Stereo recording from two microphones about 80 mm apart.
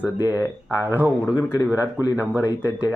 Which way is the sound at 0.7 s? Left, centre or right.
Right.